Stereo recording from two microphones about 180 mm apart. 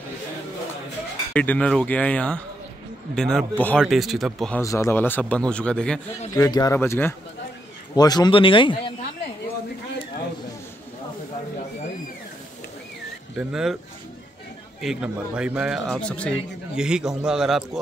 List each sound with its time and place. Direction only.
1.3 s a man's voice: 10° left (ahead or behind)
4.6 s a man's voice: 15° left (ahead or behind)
6.3 s speech: 20° left (ahead or behind)
13.4 s a man's voice: 5° right (ahead or behind)
14.8 s a man's voice: 5° right (ahead or behind)
16.7 s a man's voice: 5° right (ahead or behind)